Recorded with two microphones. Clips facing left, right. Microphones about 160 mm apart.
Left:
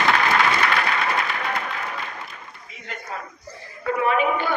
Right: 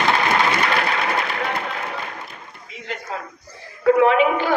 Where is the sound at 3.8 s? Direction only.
85° right.